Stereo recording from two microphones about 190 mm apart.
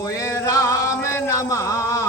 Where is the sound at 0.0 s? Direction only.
15° left (ahead or behind).